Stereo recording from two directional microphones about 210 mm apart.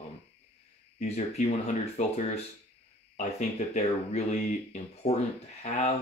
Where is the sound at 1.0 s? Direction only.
30° left (ahead or behind).